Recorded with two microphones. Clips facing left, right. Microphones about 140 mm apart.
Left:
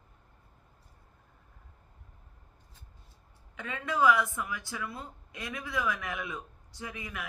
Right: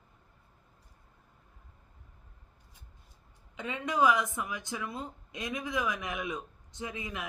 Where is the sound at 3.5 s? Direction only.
20° right (ahead or behind).